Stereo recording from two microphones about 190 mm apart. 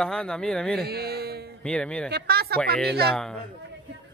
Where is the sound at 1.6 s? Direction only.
5° left (ahead or behind).